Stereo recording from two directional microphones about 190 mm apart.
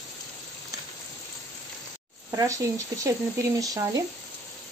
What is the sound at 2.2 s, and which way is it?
Speech, 15° right (ahead or behind).